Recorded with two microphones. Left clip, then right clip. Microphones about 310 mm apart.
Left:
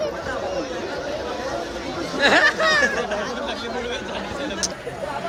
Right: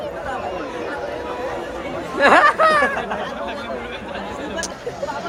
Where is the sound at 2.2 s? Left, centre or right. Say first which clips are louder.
Right 4 dB; centre.